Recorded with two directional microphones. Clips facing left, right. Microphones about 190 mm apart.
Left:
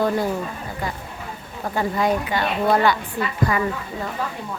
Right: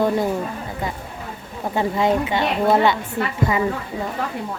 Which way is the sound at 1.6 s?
20° right (ahead or behind).